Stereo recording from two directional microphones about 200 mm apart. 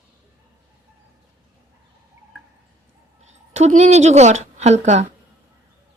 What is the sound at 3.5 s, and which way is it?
A woman's voice, 35° right (ahead or behind).